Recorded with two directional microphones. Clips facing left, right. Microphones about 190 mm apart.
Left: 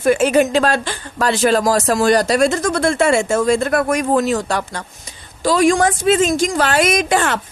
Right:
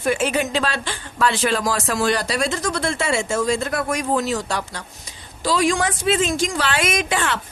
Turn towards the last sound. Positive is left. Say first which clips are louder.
# left 6 dB
turn(degrees=45)  # may be behind; listen again after turning